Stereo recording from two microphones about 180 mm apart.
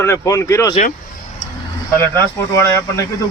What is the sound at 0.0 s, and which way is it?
Speech, 15° left (ahead or behind).